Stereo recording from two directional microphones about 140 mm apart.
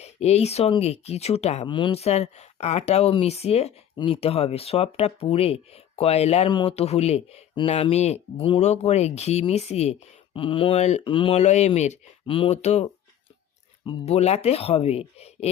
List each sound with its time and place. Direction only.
0.0 s speech: 50° left (ahead or behind)
1.6 s speech: 35° left (ahead or behind)
6.5 s speech: 35° left (ahead or behind)
6.7 s speech: 50° left (ahead or behind)
11.0 s speech: 40° left (ahead or behind)
11.3 s speech: 55° left (ahead or behind)
12.2 s speech: 40° left (ahead or behind)
14.0 s speech: 50° left (ahead or behind)